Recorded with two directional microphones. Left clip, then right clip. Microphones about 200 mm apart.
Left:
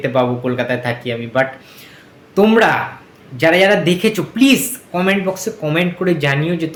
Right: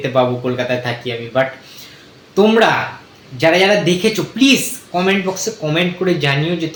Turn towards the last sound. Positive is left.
turn(degrees=15)  # may be behind; listen again after turning